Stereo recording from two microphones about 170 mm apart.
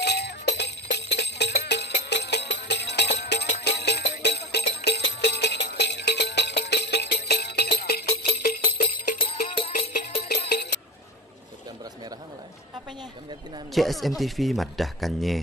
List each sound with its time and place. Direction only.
0.0 s music: 80° left
9.2 s music: 35° left (ahead or behind)
10.5 s a sound: 80° left
13.7 s speech: centre (ahead or behind)